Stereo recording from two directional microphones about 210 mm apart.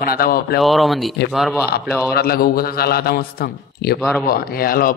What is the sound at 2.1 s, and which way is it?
A man's voice, 45° left (ahead or behind).